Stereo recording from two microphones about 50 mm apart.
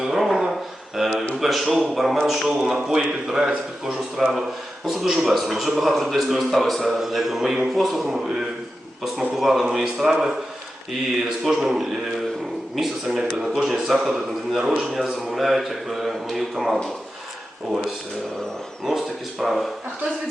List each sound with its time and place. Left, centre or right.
0.0 s a sound: centre
1.1 s a man's voice: left
1.4 s a man's voice: centre
18.9 s speech: centre